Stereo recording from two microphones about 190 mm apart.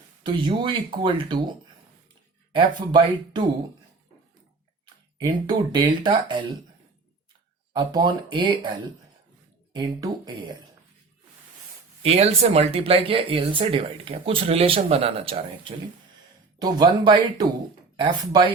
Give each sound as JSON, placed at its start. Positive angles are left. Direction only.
{"t": 0.2, "sound": "speech", "side_deg": -25}
{"t": 2.5, "sound": "speech", "side_deg": -25}
{"t": 5.2, "sound": "speech", "side_deg": -20}
{"t": 7.7, "sound": "speech", "side_deg": -20}
{"t": 9.7, "sound": "speech", "side_deg": -25}
{"t": 12.0, "sound": "speech", "side_deg": -35}